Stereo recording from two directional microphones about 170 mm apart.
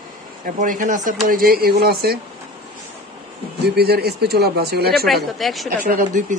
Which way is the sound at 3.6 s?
70° right (ahead or behind).